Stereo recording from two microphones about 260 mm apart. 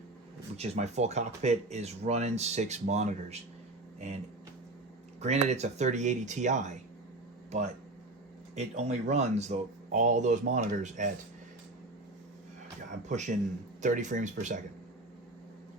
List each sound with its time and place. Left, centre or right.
0.5 s speech: right
5.2 s speech: right
8.5 s speech: right
13.1 s speech: right